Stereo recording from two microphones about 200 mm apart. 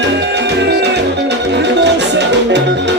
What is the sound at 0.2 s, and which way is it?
Music, 60° right (ahead or behind).